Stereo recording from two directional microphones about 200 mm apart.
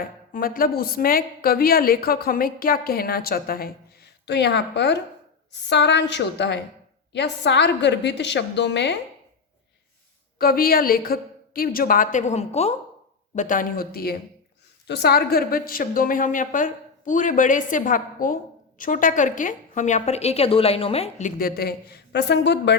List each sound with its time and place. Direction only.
0.0 s a woman's voice: 45° left (ahead or behind)
10.3 s a woman's voice: 50° left (ahead or behind)